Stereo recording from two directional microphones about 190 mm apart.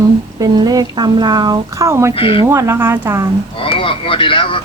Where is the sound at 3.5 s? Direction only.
30° left (ahead or behind).